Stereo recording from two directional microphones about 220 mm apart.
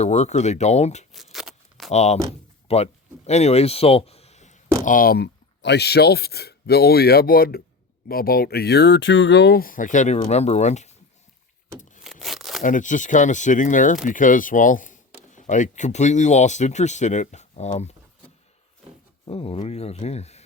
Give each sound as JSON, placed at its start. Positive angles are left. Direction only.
{"t": 0.0, "sound": "speech", "side_deg": 30}
{"t": 1.1, "sound": "tearing", "side_deg": 0}
{"t": 1.9, "sound": "speech", "side_deg": 30}
{"t": 12.2, "sound": "tearing", "side_deg": 0}
{"t": 12.6, "sound": "speech", "side_deg": 35}
{"t": 19.2, "sound": "speech", "side_deg": 25}